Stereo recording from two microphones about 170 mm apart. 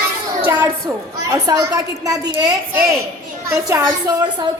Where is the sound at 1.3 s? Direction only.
20° right (ahead or behind).